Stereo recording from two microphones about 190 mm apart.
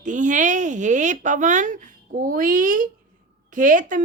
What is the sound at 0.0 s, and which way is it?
A woman's voice, 40° right (ahead or behind).